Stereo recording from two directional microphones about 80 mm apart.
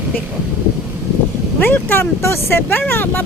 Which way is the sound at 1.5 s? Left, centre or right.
Left.